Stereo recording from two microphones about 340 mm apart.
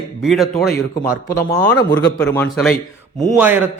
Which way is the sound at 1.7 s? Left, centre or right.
Centre.